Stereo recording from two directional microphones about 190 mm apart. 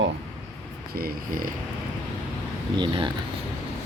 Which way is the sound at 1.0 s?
50° right (ahead or behind).